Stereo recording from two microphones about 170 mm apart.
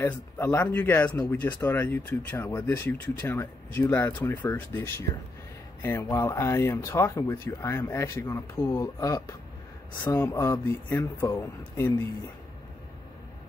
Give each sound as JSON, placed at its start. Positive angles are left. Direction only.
{"t": 0.0, "sound": "speech", "side_deg": 15}